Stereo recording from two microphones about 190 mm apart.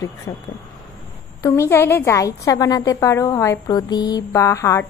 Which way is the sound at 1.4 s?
15° left (ahead or behind).